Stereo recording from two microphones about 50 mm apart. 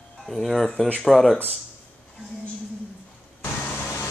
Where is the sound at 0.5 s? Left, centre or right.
Centre.